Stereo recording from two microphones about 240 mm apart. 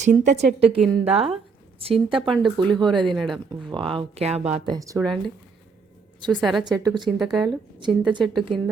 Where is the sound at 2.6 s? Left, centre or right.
Centre.